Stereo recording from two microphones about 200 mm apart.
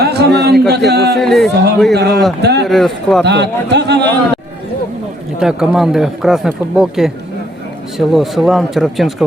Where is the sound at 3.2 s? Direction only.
60° right (ahead or behind).